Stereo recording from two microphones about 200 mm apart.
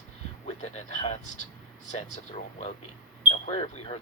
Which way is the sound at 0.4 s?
35° left (ahead or behind).